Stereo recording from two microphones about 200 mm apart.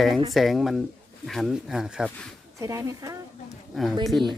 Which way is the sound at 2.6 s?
15° right (ahead or behind).